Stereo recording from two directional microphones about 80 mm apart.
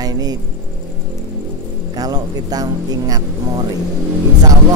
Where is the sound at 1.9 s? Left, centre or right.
Right.